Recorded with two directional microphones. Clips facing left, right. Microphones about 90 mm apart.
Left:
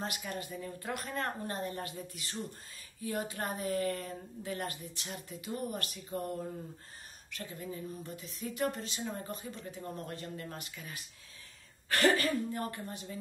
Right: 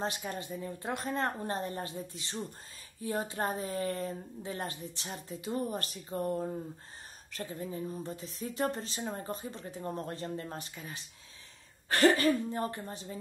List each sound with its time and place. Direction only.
0.0 s speech: 30° right (ahead or behind)